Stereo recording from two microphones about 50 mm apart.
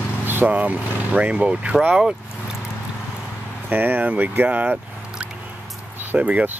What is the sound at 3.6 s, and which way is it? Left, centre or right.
Speech, right.